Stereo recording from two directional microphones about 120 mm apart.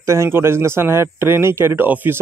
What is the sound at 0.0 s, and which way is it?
A man's voice, 25° right (ahead or behind).